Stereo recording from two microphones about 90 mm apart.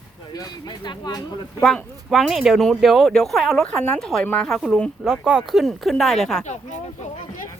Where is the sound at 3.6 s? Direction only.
15° left (ahead or behind).